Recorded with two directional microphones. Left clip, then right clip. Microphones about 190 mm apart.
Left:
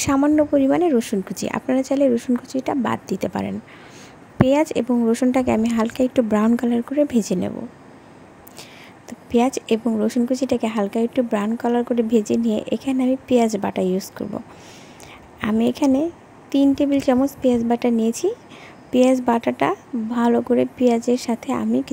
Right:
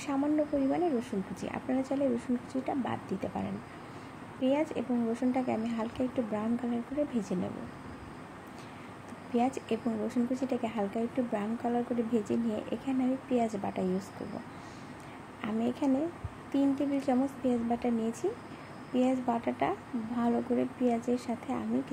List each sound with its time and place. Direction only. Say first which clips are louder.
0.0 s speech: left 13 dB; 60° left (ahead or behind)
9.3 s speech: left 12 dB; 55° left (ahead or behind)
15.4 s a woman's voice: left 12 dB; 55° left (ahead or behind)